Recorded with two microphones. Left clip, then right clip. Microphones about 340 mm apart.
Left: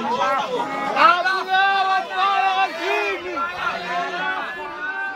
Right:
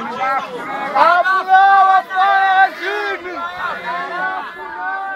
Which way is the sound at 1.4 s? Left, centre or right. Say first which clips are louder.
Right 10 dB; centre.